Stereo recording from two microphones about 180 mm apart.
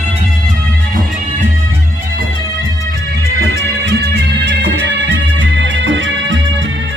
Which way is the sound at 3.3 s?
75° right (ahead or behind).